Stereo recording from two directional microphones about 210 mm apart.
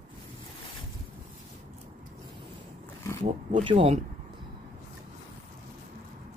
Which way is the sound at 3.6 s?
25° right (ahead or behind).